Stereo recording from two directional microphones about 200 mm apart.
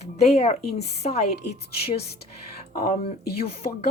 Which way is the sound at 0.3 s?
30° left (ahead or behind).